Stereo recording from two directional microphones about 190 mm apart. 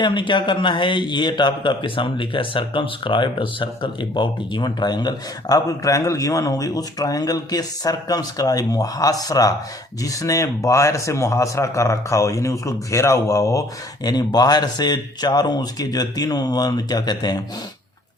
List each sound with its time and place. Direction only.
0.0 s a man's voice: 25° left (ahead or behind)